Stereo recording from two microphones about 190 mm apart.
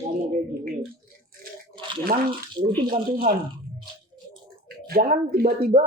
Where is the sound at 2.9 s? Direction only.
50° right (ahead or behind).